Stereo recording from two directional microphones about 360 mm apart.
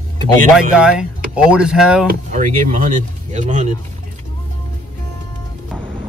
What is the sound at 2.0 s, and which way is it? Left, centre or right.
Speech, right.